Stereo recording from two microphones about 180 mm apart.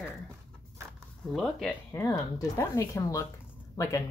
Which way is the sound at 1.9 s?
15° left (ahead or behind).